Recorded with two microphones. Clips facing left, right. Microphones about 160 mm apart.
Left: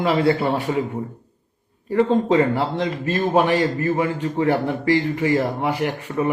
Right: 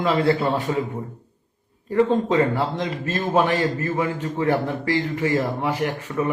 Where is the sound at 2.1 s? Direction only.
15° left (ahead or behind).